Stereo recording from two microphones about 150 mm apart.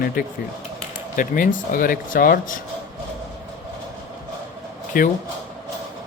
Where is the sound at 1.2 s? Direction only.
65° left (ahead or behind).